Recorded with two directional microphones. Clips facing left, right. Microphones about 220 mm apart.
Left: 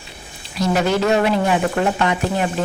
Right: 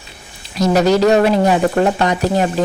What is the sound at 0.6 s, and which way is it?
Speech, 40° right (ahead or behind).